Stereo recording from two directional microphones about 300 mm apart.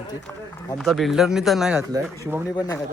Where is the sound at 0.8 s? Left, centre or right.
Centre.